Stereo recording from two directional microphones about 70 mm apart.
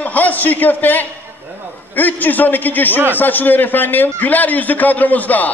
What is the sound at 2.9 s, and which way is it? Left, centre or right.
Speech, right.